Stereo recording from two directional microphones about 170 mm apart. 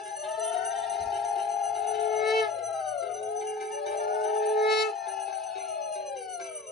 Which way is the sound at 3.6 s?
70° left (ahead or behind).